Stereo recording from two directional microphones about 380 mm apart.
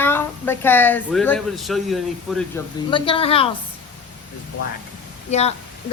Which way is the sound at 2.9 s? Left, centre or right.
Centre.